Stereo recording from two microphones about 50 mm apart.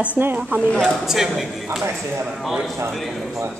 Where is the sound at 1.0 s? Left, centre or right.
Centre.